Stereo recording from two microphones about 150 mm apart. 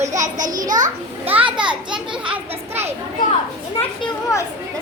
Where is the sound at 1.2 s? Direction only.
10° right (ahead or behind).